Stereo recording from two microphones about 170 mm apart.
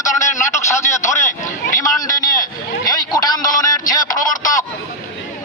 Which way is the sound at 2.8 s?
25° left (ahead or behind).